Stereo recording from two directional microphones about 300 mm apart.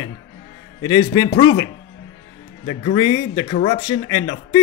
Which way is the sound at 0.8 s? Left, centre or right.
Centre.